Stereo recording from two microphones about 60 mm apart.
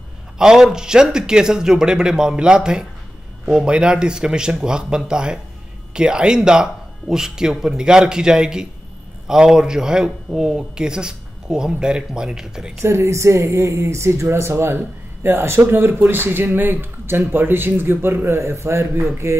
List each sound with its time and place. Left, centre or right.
0.4 s speech: centre
12.8 s speech: right